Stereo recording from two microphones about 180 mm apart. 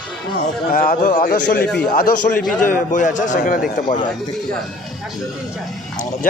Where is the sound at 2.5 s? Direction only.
45° left (ahead or behind).